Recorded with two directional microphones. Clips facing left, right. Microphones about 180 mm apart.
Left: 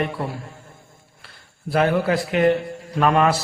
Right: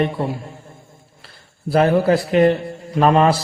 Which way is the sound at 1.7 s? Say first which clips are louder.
Right 4 dB; 35° right (ahead or behind).